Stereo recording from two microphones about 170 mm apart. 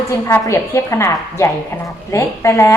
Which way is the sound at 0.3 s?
15° left (ahead or behind).